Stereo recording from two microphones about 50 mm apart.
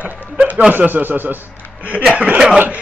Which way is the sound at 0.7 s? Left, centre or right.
Right.